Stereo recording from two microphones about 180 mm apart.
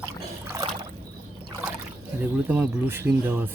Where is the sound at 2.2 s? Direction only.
10° right (ahead or behind).